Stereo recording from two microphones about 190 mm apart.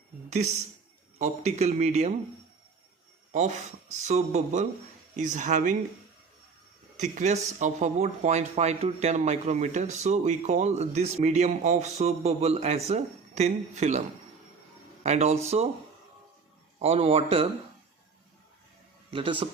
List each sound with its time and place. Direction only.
0.3 s speech: 35° right (ahead or behind)
3.3 s speech: 40° right (ahead or behind)
6.9 s speech: 40° right (ahead or behind)
15.0 s speech: 35° right (ahead or behind)
16.8 s speech: 30° right (ahead or behind)
19.1 s speech: 25° right (ahead or behind)